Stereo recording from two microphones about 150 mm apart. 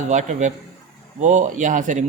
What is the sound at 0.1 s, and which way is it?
A man's voice, 55° right (ahead or behind).